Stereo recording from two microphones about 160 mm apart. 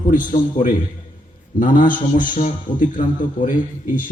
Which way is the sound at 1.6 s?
55° left (ahead or behind).